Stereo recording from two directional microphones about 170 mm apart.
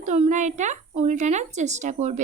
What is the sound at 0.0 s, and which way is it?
A woman's voice, 45° right (ahead or behind).